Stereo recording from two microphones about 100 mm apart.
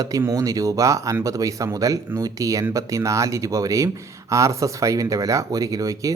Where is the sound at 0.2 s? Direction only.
30° right (ahead or behind).